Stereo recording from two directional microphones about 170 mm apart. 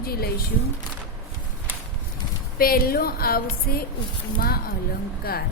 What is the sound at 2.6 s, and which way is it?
Speech, 60° left (ahead or behind).